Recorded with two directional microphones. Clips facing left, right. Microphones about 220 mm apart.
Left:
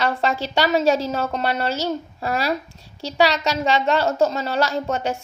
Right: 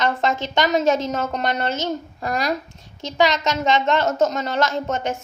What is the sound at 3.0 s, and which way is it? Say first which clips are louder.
Speech: even; 35° left (ahead or behind).